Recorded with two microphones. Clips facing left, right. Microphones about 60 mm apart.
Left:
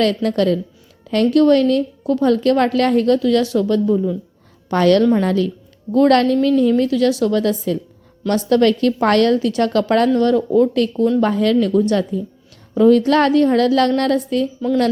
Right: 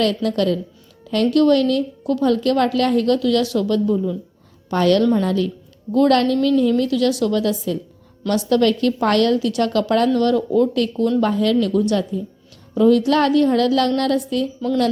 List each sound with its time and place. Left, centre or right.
0.0 s a woman's voice: left
4.7 s a woman's voice: left
10.2 s speech: left
11.2 s a woman's voice: left